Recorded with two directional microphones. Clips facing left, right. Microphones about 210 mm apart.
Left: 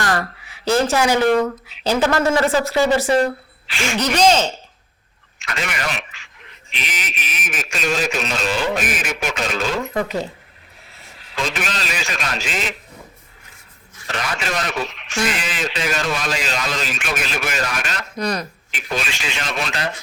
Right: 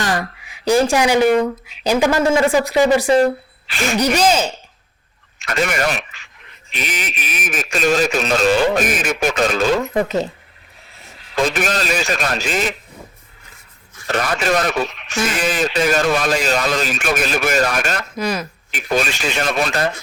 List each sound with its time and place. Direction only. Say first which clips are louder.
0.0 s speech: right 1 dB; 15° right (ahead or behind)
3.7 s a woman's voice: right 3 dB; 40° right (ahead or behind)
3.9 s speech: even; 10° right (ahead or behind)
5.5 s a man's voice: right 7 dB; 45° right (ahead or behind)
9.9 s speech: right 4 dB; 20° right (ahead or behind)
11.4 s a man's voice: right 6 dB; 45° right (ahead or behind)
14.1 s a man's voice: right 7 dB; 45° right (ahead or behind)
18.2 s speech: even; 5° right (ahead or behind)
18.7 s a man's voice: right 7 dB; 45° right (ahead or behind)